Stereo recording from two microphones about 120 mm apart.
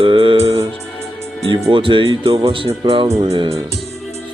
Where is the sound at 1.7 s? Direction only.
45° right (ahead or behind).